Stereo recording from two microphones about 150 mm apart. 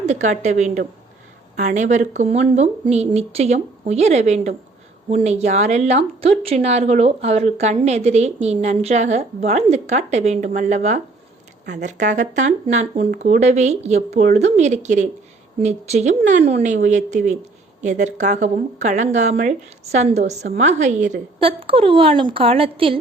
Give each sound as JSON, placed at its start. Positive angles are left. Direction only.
{"t": 0.0, "sound": "a woman's voice", "side_deg": -50}
{"t": 21.4, "sound": "a woman's voice", "side_deg": -35}